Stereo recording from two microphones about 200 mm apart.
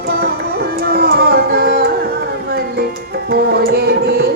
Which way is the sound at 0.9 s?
50° right (ahead or behind).